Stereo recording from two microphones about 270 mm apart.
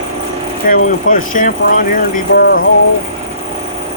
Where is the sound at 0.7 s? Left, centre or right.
Left.